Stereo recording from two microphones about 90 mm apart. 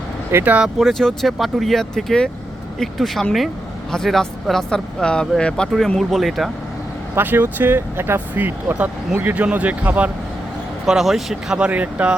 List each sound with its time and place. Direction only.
0.4 s speech: 15° right (ahead or behind)
0.8 s speech: 5° left (ahead or behind)
6.0 s speech: centre (ahead or behind)
7.2 s speech: 20° right (ahead or behind)
10.8 s speech: 5° right (ahead or behind)